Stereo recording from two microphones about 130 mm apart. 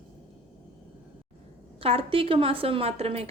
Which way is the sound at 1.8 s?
45° right (ahead or behind).